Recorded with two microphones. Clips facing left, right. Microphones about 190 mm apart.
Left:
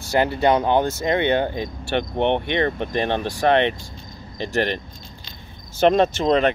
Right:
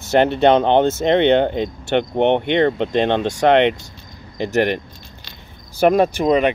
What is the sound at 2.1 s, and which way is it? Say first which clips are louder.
Speech: right 4 dB; 20° right (ahead or behind).